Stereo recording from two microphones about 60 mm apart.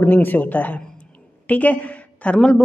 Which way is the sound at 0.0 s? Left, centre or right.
Left.